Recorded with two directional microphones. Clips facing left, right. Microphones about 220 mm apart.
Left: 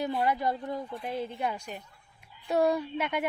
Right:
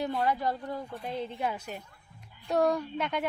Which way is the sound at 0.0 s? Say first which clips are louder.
Left 1 dB; 5° left (ahead or behind).